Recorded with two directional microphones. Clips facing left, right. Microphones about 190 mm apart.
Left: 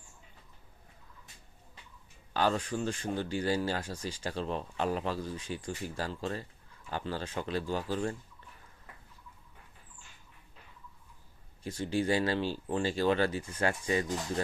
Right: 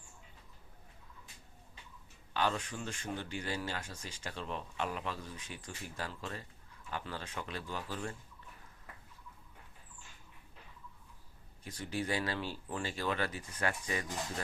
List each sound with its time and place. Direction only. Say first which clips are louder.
2.3 s speech: left 5 dB; 40° left (ahead or behind)
11.6 s speech: left 7 dB; 30° left (ahead or behind)